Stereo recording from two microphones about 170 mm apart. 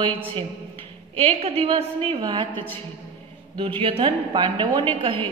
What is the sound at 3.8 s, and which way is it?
A woman's voice, 35° right (ahead or behind).